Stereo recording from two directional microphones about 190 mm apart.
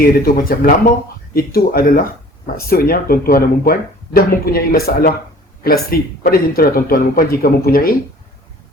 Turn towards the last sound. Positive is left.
turn(degrees=50)  # may be behind; listen again after turning